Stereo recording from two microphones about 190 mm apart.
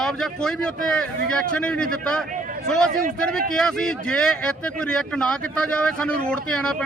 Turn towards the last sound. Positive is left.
turn(degrees=5)  # may be behind; listen again after turning